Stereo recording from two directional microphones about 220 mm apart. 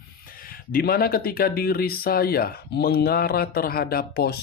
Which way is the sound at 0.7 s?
45° left (ahead or behind).